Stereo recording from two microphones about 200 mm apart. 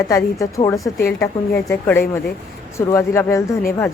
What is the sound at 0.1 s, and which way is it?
A woman's voice, 15° left (ahead or behind).